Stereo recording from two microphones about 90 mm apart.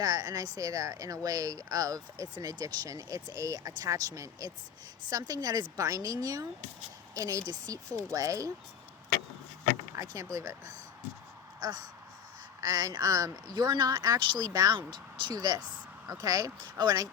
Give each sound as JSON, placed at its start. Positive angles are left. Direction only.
{"t": 0.0, "sound": "speech", "side_deg": -40}
{"t": 9.9, "sound": "speech", "side_deg": -40}
{"t": 11.6, "sound": "speech", "side_deg": -45}
{"t": 14.8, "sound": "speech", "side_deg": -60}